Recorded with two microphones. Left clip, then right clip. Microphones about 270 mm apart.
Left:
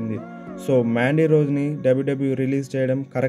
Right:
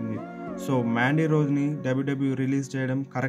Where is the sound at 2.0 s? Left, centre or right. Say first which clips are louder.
Left 5 dB; right.